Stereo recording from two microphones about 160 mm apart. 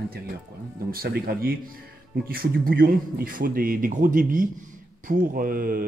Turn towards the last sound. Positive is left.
turn(degrees=-65)  # may be behind; listen again after turning